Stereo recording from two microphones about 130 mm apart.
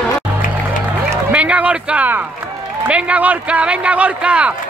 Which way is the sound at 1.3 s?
10° right (ahead or behind).